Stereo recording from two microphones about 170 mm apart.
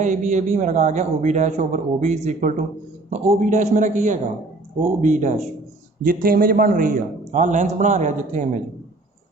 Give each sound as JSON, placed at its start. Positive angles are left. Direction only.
{"t": 0.0, "sound": "speech", "side_deg": -45}
{"t": 6.0, "sound": "a man's voice", "side_deg": -55}